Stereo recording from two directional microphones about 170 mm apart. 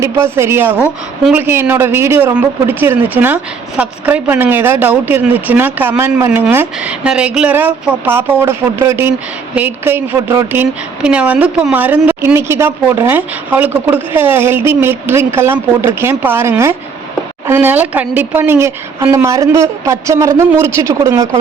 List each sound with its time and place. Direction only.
0.0 s speech: 15° right (ahead or behind)